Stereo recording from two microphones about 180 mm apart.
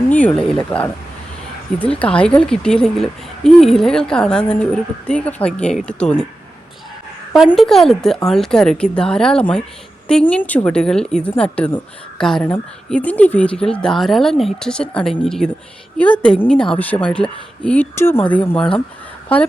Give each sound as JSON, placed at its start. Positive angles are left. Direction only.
{"t": 0.1, "sound": "a woman's voice", "side_deg": 5}
{"t": 7.3, "sound": "a woman's voice", "side_deg": 0}